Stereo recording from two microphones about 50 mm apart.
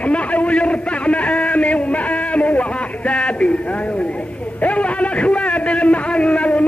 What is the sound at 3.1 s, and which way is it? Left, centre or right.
Music, left.